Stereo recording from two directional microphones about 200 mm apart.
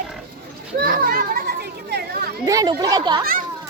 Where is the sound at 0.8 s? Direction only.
45° right (ahead or behind).